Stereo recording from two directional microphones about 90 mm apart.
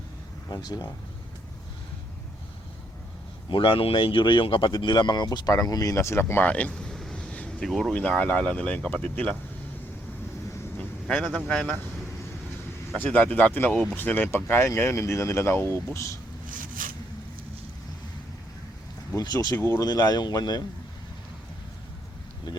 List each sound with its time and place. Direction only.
0.5 s speech: 45° left (ahead or behind)
3.5 s speech: 65° left (ahead or behind); by 7.9 s 5° left (ahead or behind)
7.9 s speech: 15° left (ahead or behind)
11.0 s speech: 5° left (ahead or behind)
13.0 s speech: 15° left (ahead or behind)
19.1 s speech: 45° left (ahead or behind)
19.5 s speech: 25° left (ahead or behind)
19.8 s speech: 45° left (ahead or behind)